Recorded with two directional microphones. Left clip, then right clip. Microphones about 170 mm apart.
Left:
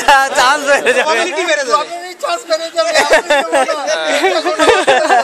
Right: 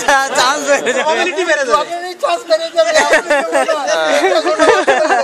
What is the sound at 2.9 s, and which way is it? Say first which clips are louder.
Speech: left 3 dB; 40° left (ahead or behind).